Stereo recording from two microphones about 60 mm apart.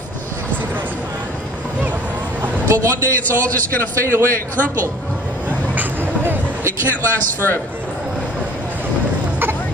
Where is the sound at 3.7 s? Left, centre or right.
Left.